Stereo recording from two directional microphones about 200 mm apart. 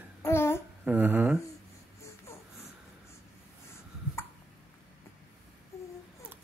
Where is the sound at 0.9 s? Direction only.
10° right (ahead or behind).